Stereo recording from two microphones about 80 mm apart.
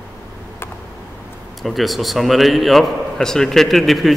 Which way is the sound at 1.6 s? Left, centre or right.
Centre.